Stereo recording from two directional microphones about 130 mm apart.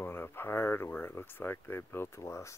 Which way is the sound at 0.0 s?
15° left (ahead or behind).